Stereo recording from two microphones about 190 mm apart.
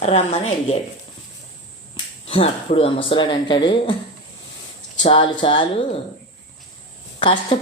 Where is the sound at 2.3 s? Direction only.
30° left (ahead or behind).